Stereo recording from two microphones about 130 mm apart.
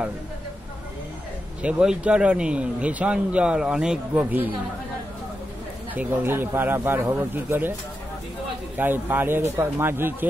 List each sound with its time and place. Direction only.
1.6 s speech: 10° right (ahead or behind)
5.9 s speech: 15° right (ahead or behind)
8.7 s speech: 15° right (ahead or behind)